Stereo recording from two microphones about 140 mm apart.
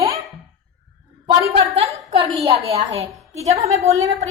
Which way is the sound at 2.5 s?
45° right (ahead or behind).